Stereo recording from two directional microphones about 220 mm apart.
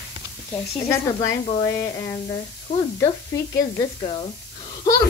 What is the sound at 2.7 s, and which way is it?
A child's voice, 15° left (ahead or behind).